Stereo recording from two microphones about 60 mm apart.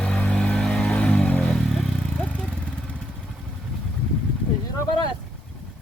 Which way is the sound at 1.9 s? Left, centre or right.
Centre.